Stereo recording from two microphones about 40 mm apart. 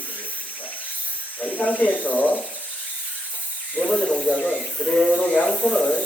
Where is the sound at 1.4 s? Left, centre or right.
Left.